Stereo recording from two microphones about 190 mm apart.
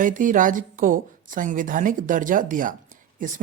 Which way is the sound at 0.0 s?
45° right (ahead or behind).